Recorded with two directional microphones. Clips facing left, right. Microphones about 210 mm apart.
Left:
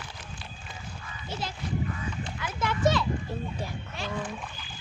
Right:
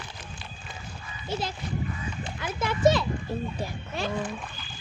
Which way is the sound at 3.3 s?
5° right (ahead or behind).